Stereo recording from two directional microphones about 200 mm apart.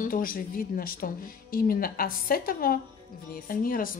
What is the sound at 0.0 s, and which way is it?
Speech, 45° left (ahead or behind).